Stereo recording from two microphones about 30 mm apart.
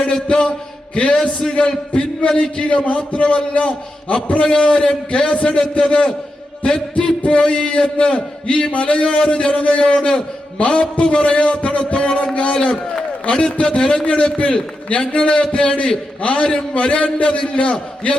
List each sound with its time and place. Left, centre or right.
0.3 s a man's voice: left
5.8 s a man's voice: left
7.3 s a man's voice: left
13.3 s a man's voice: left